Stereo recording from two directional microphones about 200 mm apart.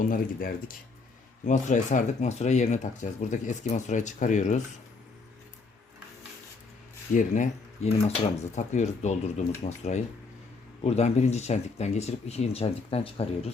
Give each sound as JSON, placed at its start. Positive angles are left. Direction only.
{"t": 0.0, "sound": "speech", "side_deg": 45}
{"t": 7.1, "sound": "speech", "side_deg": 40}
{"t": 10.8, "sound": "speech", "side_deg": 35}